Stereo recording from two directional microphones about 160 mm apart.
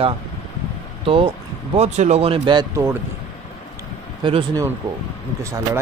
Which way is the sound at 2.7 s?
15° right (ahead or behind).